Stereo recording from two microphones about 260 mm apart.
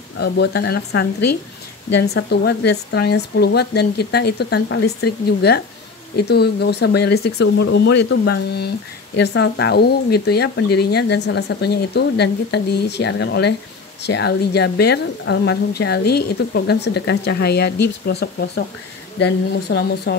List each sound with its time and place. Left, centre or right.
0.2 s speech: left